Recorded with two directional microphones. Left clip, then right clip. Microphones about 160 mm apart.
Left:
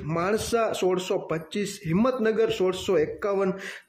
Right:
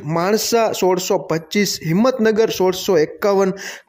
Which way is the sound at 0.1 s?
35° right (ahead or behind).